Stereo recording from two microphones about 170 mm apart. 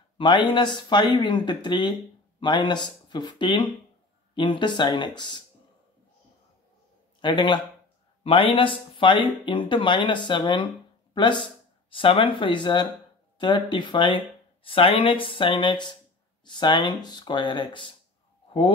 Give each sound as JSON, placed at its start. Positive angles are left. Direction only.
{"t": 0.2, "sound": "speech", "side_deg": 30}
{"t": 7.2, "sound": "speech", "side_deg": 30}